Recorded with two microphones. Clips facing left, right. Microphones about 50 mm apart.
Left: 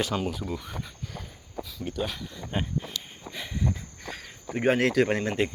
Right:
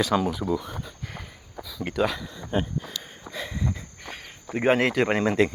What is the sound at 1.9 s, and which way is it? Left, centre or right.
Speech, right.